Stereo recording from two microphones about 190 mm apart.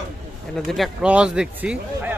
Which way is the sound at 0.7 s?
Centre (ahead or behind).